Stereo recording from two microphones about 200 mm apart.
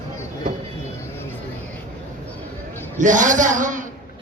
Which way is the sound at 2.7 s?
10° left (ahead or behind).